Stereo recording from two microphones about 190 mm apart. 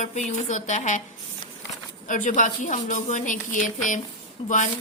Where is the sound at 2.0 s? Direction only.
40° left (ahead or behind).